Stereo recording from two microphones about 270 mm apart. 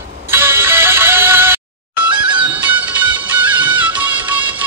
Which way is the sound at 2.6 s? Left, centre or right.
Centre.